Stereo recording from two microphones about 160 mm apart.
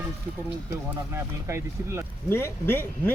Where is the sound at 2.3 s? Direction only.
15° left (ahead or behind).